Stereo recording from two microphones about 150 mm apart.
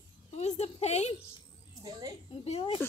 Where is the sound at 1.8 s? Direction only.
25° right (ahead or behind).